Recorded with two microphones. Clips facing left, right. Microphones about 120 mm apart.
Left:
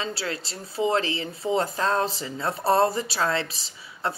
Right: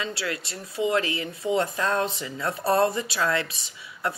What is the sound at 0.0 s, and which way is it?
Speech, 30° left (ahead or behind).